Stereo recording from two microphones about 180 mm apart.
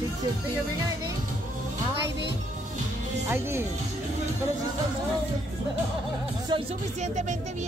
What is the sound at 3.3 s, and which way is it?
Speech, 15° right (ahead or behind).